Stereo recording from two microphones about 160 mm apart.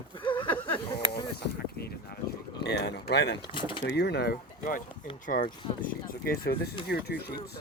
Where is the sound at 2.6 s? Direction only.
90° left.